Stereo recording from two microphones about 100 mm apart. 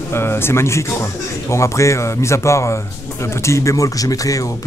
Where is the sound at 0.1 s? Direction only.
25° left (ahead or behind).